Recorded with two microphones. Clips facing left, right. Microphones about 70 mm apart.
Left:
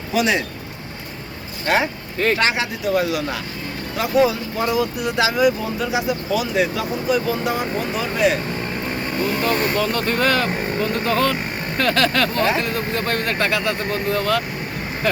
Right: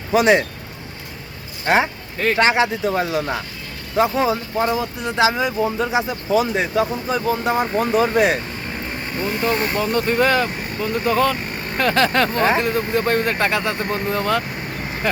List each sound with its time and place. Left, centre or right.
0.1 s speech: right
1.6 s speech: right
9.4 s speech: centre